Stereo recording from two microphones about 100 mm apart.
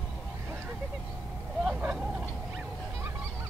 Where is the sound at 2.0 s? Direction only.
5° right (ahead or behind).